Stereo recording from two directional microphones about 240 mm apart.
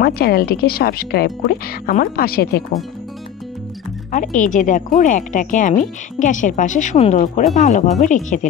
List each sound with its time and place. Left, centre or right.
0.0 s speech: left
4.1 s speech: left